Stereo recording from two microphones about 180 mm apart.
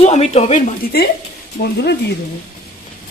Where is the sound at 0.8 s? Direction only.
55° left (ahead or behind).